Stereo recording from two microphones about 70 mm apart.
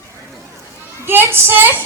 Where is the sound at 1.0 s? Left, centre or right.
Right.